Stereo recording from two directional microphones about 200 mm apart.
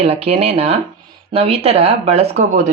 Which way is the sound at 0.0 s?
30° right (ahead or behind).